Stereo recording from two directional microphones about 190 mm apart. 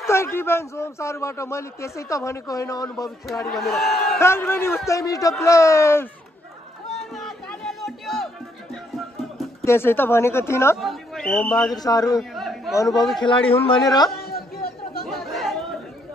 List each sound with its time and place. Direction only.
0.0 s a man's voice: 15° left (ahead or behind)
3.5 s speech: centre (ahead or behind)
4.2 s a man's voice: 10° left (ahead or behind)
7.2 s music: centre (ahead or behind)
9.7 s a man's voice: 10° left (ahead or behind)
10.8 s a man's voice: centre (ahead or behind)
11.7 s a man's voice: 20° left (ahead or behind)
12.2 s chatter: centre (ahead or behind)
13.2 s a man's voice: 25° left (ahead or behind)
14.1 s chatter: 55° left (ahead or behind)
15.0 s chatter: centre (ahead or behind)